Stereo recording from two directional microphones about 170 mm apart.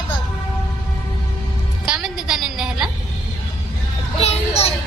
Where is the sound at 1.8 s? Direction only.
5° right (ahead or behind).